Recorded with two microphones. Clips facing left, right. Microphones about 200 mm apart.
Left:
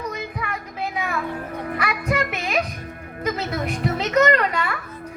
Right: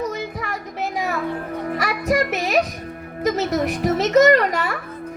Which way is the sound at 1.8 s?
40° right (ahead or behind).